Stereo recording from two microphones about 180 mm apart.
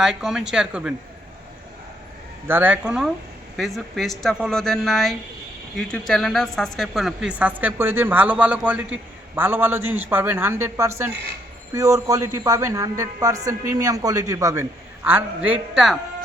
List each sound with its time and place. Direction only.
0.0 s speech: 5° right (ahead or behind)
2.5 s a woman's voice: 10° right (ahead or behind)